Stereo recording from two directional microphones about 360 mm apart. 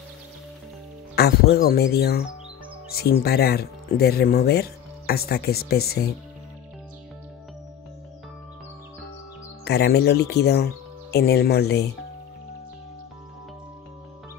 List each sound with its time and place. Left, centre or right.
1.1 s speech: left
9.7 s speech: left